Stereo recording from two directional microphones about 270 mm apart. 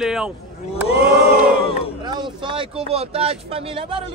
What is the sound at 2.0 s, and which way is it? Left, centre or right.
Speech, centre.